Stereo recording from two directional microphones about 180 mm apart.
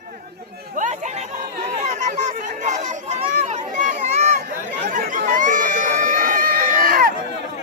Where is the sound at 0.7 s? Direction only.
45° right (ahead or behind).